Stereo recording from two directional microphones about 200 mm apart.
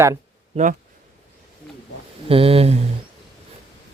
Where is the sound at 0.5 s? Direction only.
40° right (ahead or behind).